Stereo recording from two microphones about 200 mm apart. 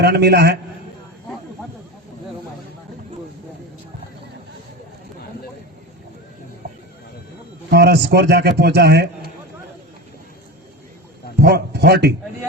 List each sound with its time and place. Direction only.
0.0 s a man's voice: 55° right (ahead or behind)
7.7 s a man's voice: 55° right (ahead or behind)
11.3 s a man's voice: 55° right (ahead or behind)